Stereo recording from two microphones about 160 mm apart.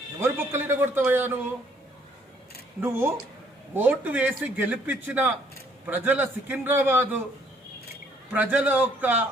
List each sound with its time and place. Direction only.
0.2 s a man's voice: 15° right (ahead or behind)
2.8 s a man's voice: 15° right (ahead or behind)
8.3 s a man's voice: 10° right (ahead or behind)